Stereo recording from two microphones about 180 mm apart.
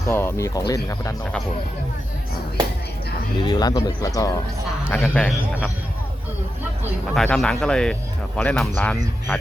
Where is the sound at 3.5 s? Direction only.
20° left (ahead or behind).